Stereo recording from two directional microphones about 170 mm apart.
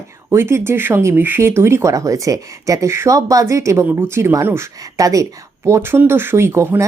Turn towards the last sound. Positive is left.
turn(degrees=-15)  # may be behind; listen again after turning